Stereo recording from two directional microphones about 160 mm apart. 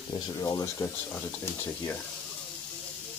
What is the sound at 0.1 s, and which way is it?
Speech, 25° left (ahead or behind).